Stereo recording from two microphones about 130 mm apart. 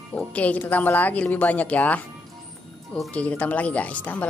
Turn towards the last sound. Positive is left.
turn(degrees=10)  # may be behind; listen again after turning